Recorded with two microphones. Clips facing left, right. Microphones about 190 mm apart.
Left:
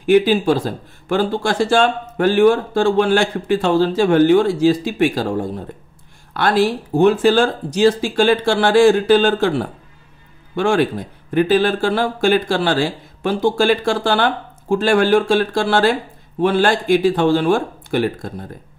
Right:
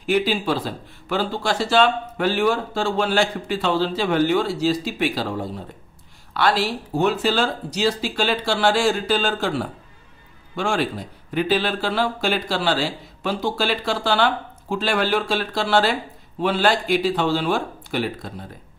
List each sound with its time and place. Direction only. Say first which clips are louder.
0.0 s speech: left 8 dB; 50° left (ahead or behind)